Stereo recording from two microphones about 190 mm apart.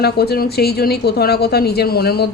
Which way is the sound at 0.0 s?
55° left (ahead or behind).